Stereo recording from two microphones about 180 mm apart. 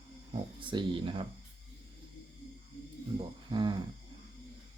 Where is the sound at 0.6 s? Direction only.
25° right (ahead or behind).